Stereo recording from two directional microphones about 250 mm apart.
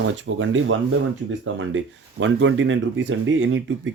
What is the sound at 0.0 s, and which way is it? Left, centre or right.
Speech, right.